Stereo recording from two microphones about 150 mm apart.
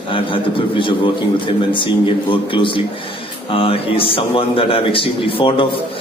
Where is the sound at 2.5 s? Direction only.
35° left (ahead or behind).